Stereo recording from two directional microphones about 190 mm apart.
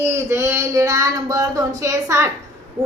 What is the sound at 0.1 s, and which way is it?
A woman's voice, 15° right (ahead or behind).